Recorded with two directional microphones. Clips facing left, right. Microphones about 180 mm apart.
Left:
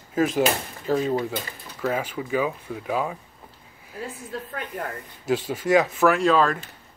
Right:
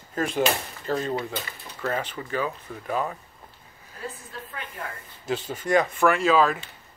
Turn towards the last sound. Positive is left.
turn(degrees=-5)  # may be behind; listen again after turning